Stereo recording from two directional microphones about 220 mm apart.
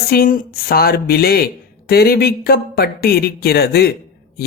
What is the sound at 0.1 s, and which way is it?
Speech, 40° left (ahead or behind).